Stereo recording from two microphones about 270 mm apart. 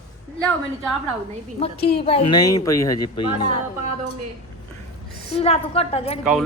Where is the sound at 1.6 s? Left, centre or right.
Left.